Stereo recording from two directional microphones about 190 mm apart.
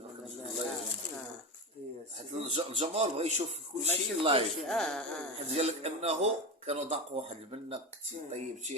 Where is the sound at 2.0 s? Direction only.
35° right (ahead or behind).